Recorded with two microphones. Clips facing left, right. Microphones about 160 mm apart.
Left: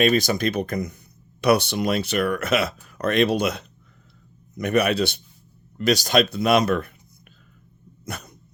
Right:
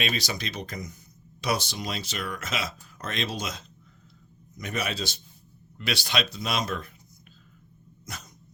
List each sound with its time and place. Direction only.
0.0 s speech: 50° left (ahead or behind)
5.7 s speech: 45° left (ahead or behind); by 6.9 s 65° left (ahead or behind)
8.0 s dog: 60° left (ahead or behind)